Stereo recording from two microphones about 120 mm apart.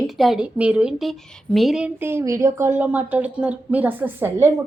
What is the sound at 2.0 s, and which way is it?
Speech, 20° right (ahead or behind).